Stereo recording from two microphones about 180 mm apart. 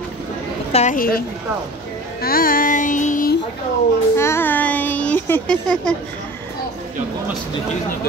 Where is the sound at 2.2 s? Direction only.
55° left (ahead or behind).